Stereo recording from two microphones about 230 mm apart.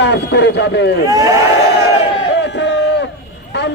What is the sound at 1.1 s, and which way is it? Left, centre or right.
Speech, centre.